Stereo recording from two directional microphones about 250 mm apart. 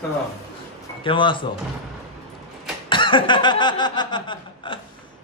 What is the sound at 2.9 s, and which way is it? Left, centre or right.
Chuckle, centre.